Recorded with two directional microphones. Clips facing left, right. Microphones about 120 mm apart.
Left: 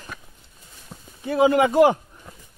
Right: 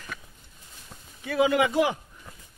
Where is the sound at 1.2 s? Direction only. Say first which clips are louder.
Left 5 dB; 35° left (ahead or behind).